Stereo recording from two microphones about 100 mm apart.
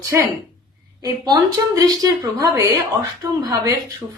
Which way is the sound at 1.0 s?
45° right (ahead or behind).